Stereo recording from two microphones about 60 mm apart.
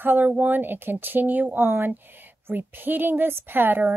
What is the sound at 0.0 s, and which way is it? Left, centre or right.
A woman's voice, right.